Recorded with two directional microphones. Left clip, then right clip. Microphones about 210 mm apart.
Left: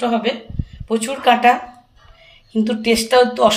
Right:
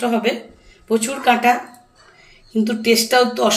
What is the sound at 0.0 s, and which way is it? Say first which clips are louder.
Speech: even; 20° left (ahead or behind).